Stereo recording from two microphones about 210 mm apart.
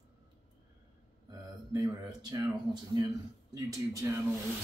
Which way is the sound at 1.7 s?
15° right (ahead or behind).